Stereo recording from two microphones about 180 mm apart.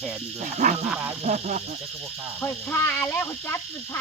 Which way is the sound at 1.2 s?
40° right (ahead or behind).